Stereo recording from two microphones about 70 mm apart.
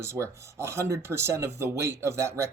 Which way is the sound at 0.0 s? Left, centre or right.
Right.